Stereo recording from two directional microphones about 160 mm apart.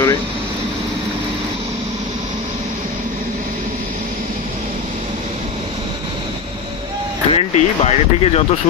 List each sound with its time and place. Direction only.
7.2 s speech: 40° left (ahead or behind)